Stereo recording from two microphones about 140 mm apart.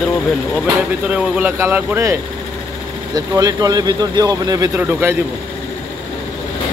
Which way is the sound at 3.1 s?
25° right (ahead or behind).